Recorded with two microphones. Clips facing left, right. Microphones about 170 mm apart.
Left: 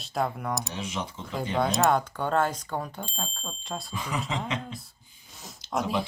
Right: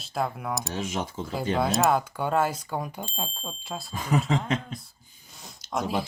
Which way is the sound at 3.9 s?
50° right (ahead or behind).